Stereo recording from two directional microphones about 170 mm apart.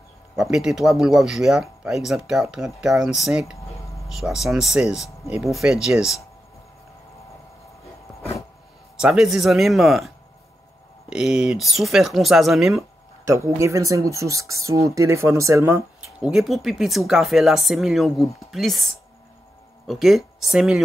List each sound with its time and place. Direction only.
0.4 s speech: 5° right (ahead or behind)
8.2 s a sound: 20° left (ahead or behind)
9.0 s speech: 5° right (ahead or behind)
13.3 s speech: 15° right (ahead or behind)
16.2 s speech: 5° right (ahead or behind)